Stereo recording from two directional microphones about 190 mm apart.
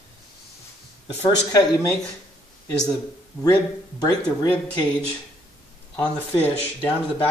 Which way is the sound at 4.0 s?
20° left (ahead or behind).